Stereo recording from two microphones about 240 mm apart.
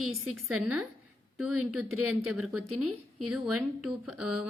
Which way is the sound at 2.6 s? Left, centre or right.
Right.